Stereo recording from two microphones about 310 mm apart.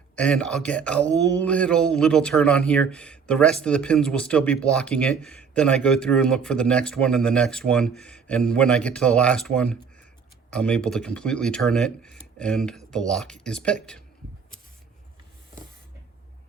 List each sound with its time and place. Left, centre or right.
0.2 s speech: centre